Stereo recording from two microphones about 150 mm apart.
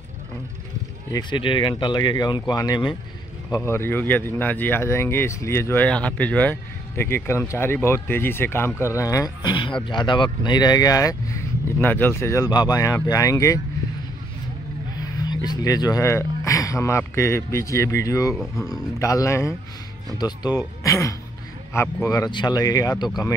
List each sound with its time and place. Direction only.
1.1 s speech: 30° left (ahead or behind)
3.5 s speech: 15° left (ahead or behind)
15.0 s speech: 25° left (ahead or behind)
18.3 s speech: centre (ahead or behind)
18.9 s speech: 20° left (ahead or behind)